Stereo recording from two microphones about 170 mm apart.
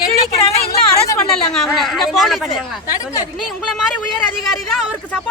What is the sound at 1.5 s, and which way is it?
Speech, centre (ahead or behind).